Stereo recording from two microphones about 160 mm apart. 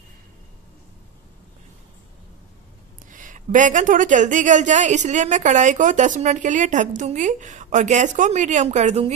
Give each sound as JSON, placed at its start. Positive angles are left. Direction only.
{"t": 3.1, "sound": "speech", "side_deg": -55}